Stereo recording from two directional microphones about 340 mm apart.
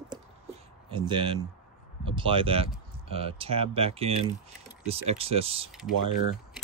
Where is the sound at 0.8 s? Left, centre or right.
Centre.